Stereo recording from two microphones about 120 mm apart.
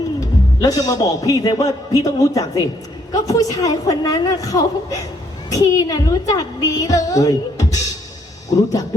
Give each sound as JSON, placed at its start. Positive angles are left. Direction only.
{"t": 0.2, "sound": "speech", "side_deg": 30}